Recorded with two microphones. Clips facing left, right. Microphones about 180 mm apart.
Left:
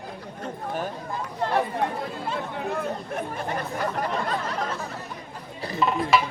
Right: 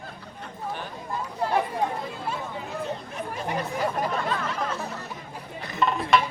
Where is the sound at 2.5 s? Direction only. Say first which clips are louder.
Left 3 dB; 60° left (ahead or behind).